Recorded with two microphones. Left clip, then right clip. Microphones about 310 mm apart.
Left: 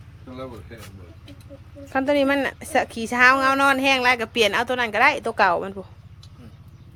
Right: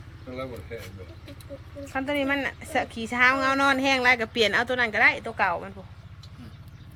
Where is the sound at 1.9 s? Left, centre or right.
Centre.